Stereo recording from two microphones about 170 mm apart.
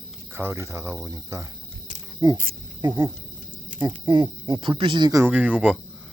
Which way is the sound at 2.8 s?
25° right (ahead or behind).